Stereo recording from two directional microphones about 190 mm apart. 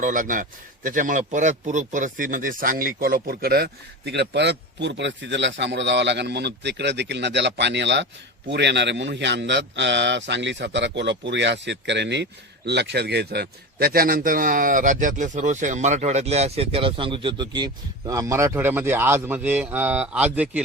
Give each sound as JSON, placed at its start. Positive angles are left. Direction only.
{"t": 0.0, "sound": "a man's voice", "side_deg": -45}